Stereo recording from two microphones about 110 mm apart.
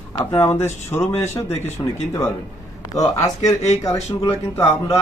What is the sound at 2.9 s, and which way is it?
A man's voice, 35° left (ahead or behind).